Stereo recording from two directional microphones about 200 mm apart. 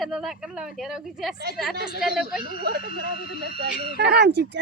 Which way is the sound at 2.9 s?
50° left (ahead or behind).